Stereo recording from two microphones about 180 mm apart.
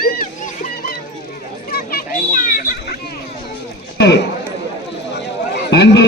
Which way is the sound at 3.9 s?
70° left (ahead or behind).